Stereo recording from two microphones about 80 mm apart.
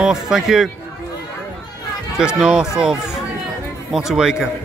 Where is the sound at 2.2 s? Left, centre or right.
Centre.